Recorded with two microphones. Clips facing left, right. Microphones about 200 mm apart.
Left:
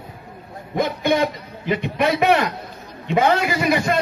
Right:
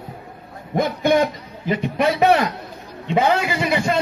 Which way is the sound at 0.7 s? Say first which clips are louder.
Right 2 dB; 50° right (ahead or behind).